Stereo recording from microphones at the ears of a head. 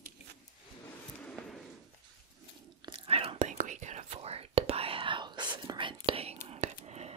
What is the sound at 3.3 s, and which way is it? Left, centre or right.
Whispering, right.